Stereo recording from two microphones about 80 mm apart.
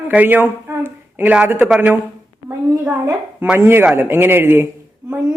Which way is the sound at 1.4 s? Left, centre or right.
Right.